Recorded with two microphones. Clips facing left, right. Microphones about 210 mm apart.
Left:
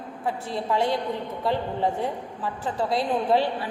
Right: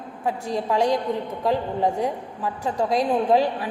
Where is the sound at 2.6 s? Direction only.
15° right (ahead or behind).